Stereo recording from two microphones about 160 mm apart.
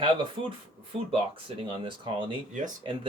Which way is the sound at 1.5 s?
30° right (ahead or behind).